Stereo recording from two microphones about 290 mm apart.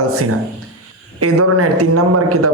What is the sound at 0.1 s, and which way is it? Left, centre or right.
A man's voice, right.